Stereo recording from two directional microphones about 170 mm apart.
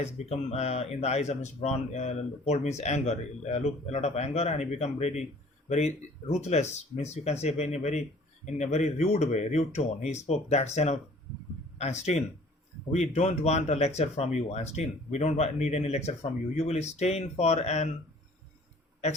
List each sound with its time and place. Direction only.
0.0 s speech: 40° left (ahead or behind)